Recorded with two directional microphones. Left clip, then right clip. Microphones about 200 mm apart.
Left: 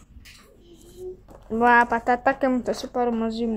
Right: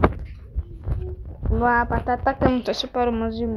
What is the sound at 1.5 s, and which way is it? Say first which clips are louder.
Speech: left 3 dB; 15° left (ahead or behind).